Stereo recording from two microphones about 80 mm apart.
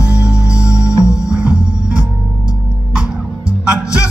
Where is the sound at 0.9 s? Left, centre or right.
Left.